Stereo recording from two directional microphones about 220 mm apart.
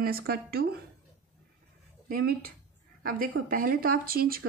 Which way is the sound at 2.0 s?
40° right (ahead or behind).